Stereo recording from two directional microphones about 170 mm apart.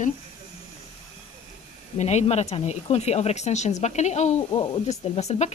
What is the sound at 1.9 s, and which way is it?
Speech, 40° left (ahead or behind).